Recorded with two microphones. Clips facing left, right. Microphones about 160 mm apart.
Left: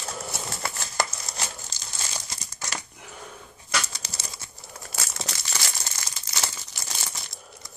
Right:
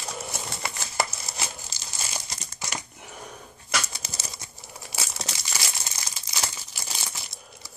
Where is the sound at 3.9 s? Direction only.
10° right (ahead or behind).